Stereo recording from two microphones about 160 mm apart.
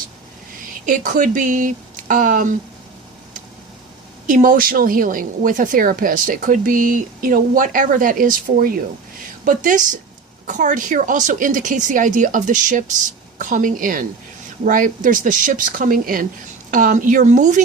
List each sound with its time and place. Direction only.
0.6 s speech: 55° right (ahead or behind)
4.3 s a woman's voice: 55° right (ahead or behind)